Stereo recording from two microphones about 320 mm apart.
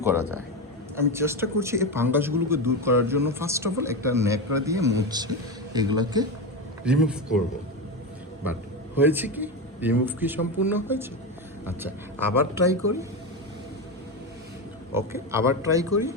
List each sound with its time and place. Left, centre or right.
0.0 s a man's voice: centre
9.0 s a man's voice: centre
14.9 s speech: centre